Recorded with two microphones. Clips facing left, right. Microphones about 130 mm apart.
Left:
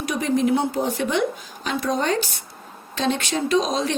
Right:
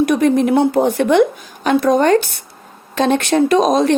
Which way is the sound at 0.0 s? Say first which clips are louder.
Right 8 dB; 60° right (ahead or behind).